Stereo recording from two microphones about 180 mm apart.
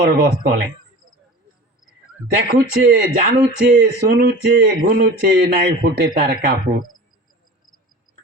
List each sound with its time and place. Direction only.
0.0 s speech: 60° right (ahead or behind)
2.5 s speech: 60° right (ahead or behind)